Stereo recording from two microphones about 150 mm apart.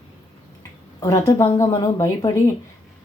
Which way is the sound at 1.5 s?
20° left (ahead or behind).